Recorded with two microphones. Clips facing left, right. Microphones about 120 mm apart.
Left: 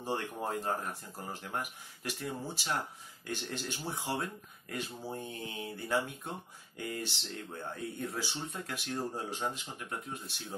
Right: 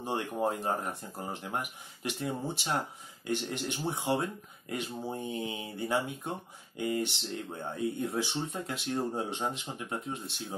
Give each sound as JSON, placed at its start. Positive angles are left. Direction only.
{"t": 0.0, "sound": "speech", "side_deg": -20}